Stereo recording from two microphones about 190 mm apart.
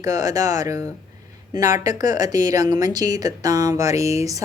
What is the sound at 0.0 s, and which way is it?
A woman's voice, 15° right (ahead or behind).